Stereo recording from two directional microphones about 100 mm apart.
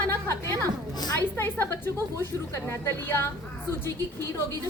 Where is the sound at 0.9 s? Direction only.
40° left (ahead or behind).